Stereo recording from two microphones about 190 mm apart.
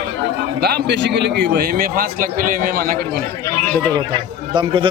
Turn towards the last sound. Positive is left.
turn(degrees=-25)  # may be behind; listen again after turning